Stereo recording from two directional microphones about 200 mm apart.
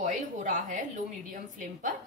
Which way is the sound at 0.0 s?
40° right (ahead or behind).